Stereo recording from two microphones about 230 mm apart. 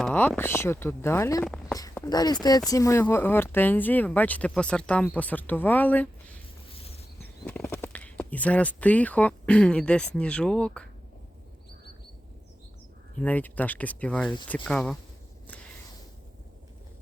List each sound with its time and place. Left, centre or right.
0.0 s speech: centre
6.7 s a sound: left
7.2 s speech: centre
13.1 s speech: centre